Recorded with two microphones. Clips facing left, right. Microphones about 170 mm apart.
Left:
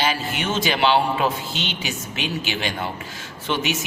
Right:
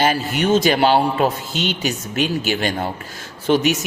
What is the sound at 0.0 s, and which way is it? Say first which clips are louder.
Speech: right 6 dB; 45° right (ahead or behind).